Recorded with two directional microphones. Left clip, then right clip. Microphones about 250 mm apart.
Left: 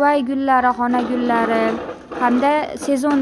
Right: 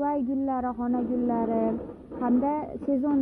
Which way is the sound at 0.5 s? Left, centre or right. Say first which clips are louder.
Left 13 dB; centre.